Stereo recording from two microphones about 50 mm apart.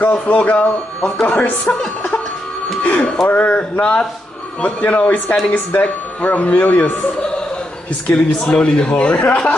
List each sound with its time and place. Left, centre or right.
0.0 s speech: left
2.8 s speech: left
8.1 s speech: left